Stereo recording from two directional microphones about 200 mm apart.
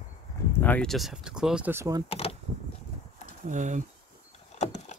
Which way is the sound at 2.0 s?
30° left (ahead or behind).